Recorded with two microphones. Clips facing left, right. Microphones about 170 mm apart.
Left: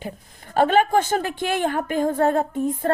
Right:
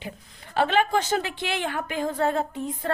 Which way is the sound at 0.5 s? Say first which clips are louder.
Left 5 dB; 45° left (ahead or behind).